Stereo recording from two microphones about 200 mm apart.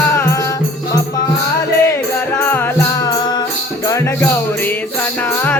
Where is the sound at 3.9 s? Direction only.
15° left (ahead or behind).